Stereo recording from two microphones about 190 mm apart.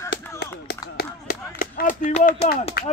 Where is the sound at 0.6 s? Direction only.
55° left (ahead or behind).